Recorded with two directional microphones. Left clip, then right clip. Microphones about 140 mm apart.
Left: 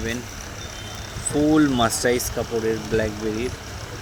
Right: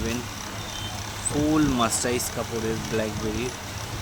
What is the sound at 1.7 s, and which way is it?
Speech, 25° left (ahead or behind).